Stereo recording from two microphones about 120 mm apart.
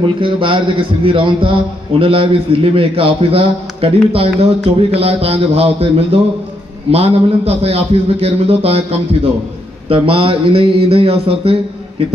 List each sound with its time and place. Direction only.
0.0 s a man's voice: 45° right (ahead or behind)
9.8 s a man's voice: 50° right (ahead or behind)